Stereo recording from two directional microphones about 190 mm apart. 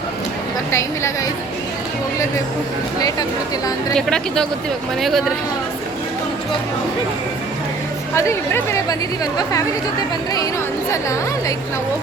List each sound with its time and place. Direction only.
0.7 s speech: 15° left (ahead or behind)
3.9 s speech: 5° left (ahead or behind)
8.1 s speech: 15° left (ahead or behind)
10.9 s speech: 15° left (ahead or behind)